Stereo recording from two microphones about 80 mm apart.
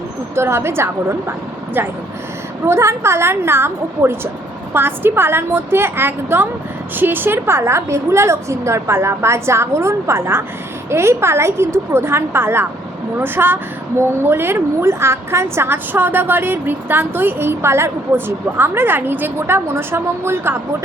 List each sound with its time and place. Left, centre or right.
0.3 s a woman's voice: right
2.6 s a woman's voice: right